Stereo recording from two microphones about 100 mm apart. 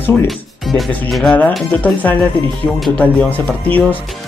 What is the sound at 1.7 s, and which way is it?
Speech, 15° left (ahead or behind).